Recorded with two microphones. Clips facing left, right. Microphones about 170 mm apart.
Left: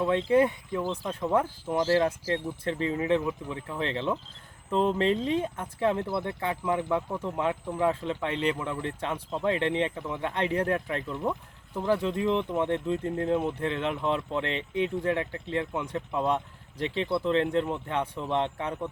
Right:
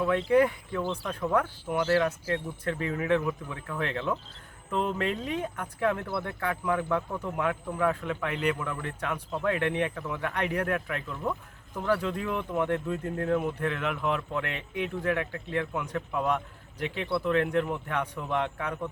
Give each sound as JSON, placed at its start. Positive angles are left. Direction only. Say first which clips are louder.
{"t": 0.1, "sound": "speech", "louder": "even", "side_deg": 25}
{"t": 11.2, "sound": "a sound", "louder": "left 2 dB", "side_deg": 15}
{"t": 11.9, "sound": "speech", "louder": "left 3 dB", "side_deg": 20}